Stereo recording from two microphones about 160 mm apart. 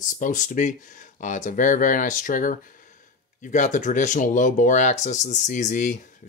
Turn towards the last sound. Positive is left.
turn(degrees=50)  # may be behind; listen again after turning